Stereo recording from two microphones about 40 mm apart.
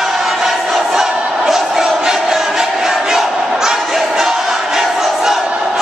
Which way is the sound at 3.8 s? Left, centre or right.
Centre.